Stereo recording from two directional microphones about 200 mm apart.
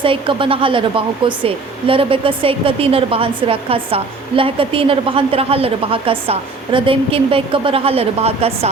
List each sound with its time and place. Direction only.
0.0 s speech: 25° right (ahead or behind)